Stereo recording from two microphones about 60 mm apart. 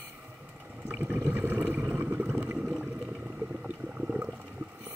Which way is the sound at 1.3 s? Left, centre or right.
Right.